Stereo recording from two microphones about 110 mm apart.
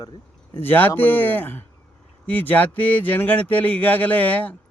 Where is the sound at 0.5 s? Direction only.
20° left (ahead or behind).